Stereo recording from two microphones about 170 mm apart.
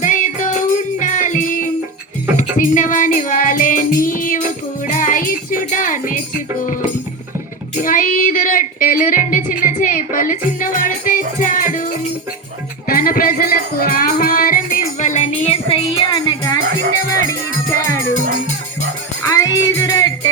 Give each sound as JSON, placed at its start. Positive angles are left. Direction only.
{"t": 0.0, "sound": "music", "side_deg": 50}
{"t": 7.8, "sound": "music", "side_deg": 55}
{"t": 12.9, "sound": "music", "side_deg": 60}
{"t": 14.9, "sound": "music", "side_deg": 45}
{"t": 19.2, "sound": "music", "side_deg": 20}